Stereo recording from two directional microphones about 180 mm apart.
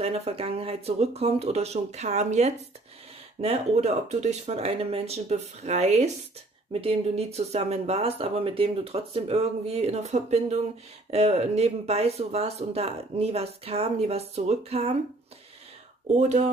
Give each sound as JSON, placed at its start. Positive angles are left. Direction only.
{"t": 0.0, "sound": "speech", "side_deg": -35}
{"t": 16.2, "sound": "speech", "side_deg": -40}